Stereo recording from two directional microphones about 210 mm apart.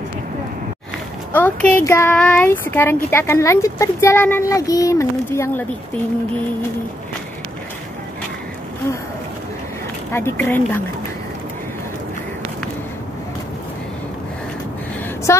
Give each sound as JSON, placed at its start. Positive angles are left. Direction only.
{"t": 1.3, "sound": "speech", "side_deg": 10}
{"t": 10.1, "sound": "speech", "side_deg": 10}
{"t": 15.3, "sound": "speech", "side_deg": 15}